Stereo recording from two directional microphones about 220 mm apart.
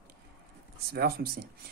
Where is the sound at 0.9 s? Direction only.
45° right (ahead or behind).